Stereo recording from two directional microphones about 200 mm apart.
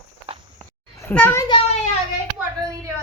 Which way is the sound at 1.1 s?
10° left (ahead or behind).